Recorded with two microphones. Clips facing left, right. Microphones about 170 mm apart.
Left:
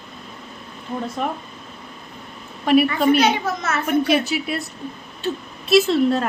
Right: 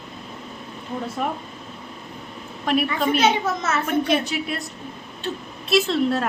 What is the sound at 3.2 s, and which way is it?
Speech, 25° right (ahead or behind).